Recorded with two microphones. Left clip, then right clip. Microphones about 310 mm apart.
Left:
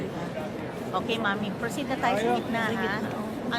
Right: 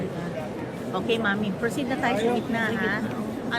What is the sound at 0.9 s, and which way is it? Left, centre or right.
Speech, centre.